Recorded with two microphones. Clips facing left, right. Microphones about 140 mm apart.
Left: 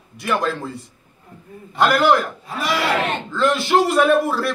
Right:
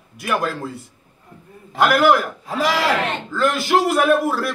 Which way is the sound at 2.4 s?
90° right.